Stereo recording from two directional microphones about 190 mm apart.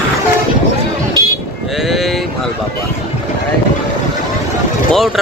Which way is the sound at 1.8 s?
Centre (ahead or behind).